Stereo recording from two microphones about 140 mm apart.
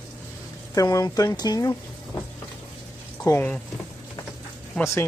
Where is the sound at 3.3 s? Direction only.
25° left (ahead or behind).